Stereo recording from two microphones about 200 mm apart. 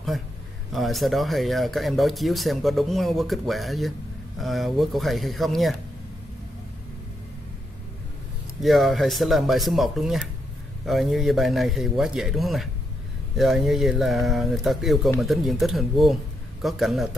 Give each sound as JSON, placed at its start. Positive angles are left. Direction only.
{"t": 0.7, "sound": "speech", "side_deg": 0}
{"t": 8.6, "sound": "speech", "side_deg": 0}